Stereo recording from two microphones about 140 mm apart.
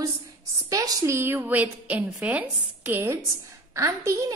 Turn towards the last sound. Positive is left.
turn(degrees=-20)  # may be behind; listen again after turning